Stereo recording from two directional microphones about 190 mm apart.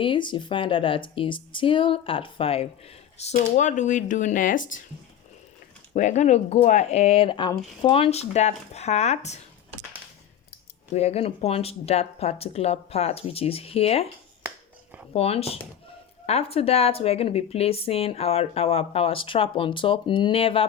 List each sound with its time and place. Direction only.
0.0 s speech: 25° left (ahead or behind); by 4.8 s 45° left (ahead or behind)
5.9 s speech: 40° left (ahead or behind)
10.9 s speech: 35° left (ahead or behind)
15.1 s speech: 30° left (ahead or behind)